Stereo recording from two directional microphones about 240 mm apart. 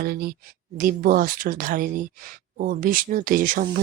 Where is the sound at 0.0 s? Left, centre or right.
Right.